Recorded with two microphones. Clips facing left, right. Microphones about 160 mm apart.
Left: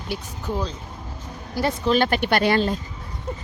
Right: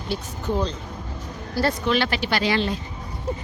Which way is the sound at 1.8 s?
45° left (ahead or behind).